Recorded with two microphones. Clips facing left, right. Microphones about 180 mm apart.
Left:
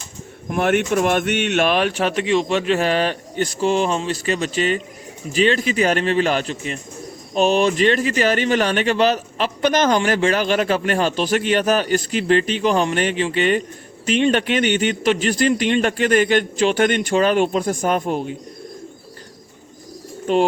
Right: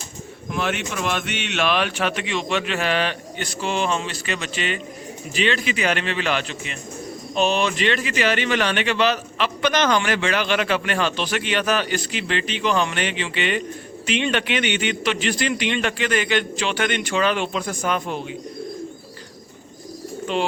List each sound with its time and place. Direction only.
0.5 s speech: 55° left (ahead or behind)
20.3 s speech: 45° left (ahead or behind)